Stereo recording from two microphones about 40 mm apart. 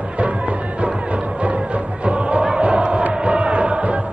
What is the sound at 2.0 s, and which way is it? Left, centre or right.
Chant, right.